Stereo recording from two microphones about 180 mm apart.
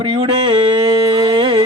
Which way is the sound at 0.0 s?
30° right (ahead or behind).